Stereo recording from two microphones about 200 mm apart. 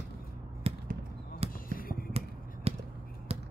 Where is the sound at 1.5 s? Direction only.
45° left (ahead or behind).